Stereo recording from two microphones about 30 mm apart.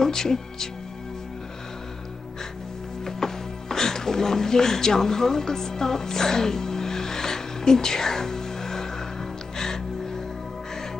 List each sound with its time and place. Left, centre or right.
0.0 s speech: centre
3.1 s music: centre